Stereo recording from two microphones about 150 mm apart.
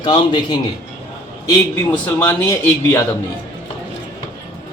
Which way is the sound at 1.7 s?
15° left (ahead or behind).